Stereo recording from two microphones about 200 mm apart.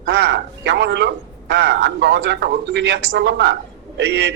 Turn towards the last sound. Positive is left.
turn(degrees=-65)  # may be behind; listen again after turning